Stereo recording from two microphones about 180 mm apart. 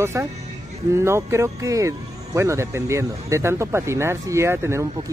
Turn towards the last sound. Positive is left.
turn(degrees=-15)  # may be behind; listen again after turning